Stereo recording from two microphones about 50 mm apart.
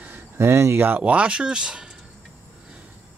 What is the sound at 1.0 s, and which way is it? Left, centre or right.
Speech, right.